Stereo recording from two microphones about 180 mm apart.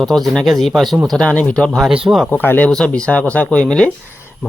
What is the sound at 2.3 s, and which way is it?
Speech, 10° left (ahead or behind).